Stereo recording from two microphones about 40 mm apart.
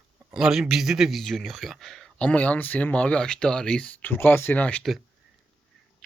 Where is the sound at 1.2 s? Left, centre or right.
Centre.